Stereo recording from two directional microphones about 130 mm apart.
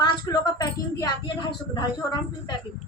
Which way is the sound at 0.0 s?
35° left (ahead or behind).